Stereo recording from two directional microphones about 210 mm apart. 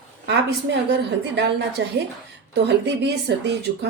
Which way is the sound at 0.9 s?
55° right (ahead or behind).